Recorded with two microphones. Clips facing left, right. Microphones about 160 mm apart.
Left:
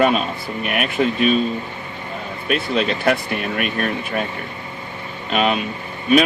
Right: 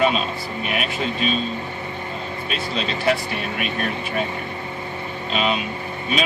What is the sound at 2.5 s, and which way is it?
Speech, 55° left (ahead or behind).